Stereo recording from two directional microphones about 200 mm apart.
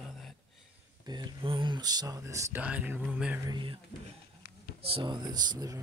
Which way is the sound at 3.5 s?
25° right (ahead or behind).